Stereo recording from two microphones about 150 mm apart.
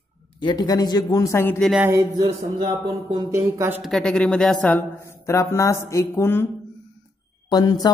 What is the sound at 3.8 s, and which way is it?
Speech, 5° left (ahead or behind).